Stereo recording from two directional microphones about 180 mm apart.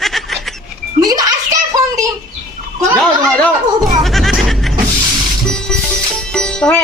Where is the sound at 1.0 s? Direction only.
20° right (ahead or behind).